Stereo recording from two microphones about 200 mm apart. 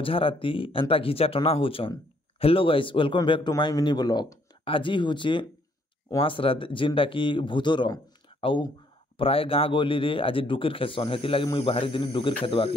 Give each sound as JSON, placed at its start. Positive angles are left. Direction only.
{"t": 0.0, "sound": "speech", "side_deg": 25}